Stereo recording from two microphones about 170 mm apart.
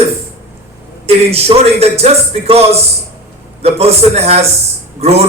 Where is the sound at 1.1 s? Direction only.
35° right (ahead or behind).